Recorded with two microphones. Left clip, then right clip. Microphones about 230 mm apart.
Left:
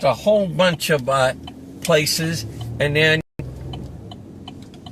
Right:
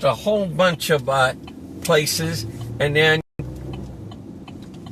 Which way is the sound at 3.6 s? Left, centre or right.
Left.